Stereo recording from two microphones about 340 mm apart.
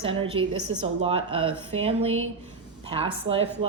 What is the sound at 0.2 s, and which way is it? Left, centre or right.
Speech, centre.